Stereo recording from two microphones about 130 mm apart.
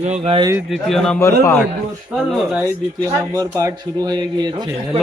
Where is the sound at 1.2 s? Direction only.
20° left (ahead or behind).